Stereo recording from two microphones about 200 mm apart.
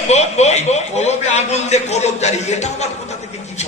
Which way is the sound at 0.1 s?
35° left (ahead or behind).